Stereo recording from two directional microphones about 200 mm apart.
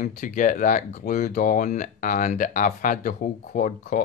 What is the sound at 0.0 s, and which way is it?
Speech, 40° left (ahead or behind).